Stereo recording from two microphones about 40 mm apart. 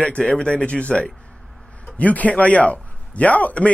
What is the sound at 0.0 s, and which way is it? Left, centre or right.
A man's voice, left.